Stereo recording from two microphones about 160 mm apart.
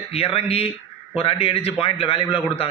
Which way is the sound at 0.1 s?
40° left (ahead or behind).